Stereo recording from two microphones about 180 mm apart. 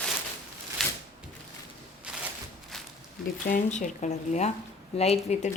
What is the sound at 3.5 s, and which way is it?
A woman's voice, 40° left (ahead or behind).